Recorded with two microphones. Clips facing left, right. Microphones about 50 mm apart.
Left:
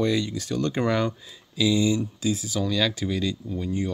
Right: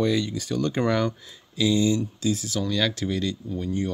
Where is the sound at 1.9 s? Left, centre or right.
Centre.